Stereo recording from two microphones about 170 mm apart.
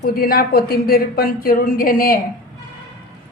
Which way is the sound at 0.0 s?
60° left (ahead or behind).